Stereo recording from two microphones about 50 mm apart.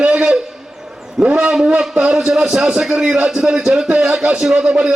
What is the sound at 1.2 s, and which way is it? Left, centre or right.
A man's voice, centre.